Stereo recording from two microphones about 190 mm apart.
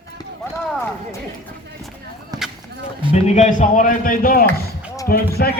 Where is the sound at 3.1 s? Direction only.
35° left (ahead or behind).